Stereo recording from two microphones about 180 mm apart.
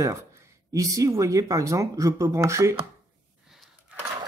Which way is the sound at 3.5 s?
Centre (ahead or behind).